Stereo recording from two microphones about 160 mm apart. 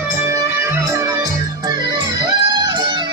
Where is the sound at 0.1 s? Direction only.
15° right (ahead or behind).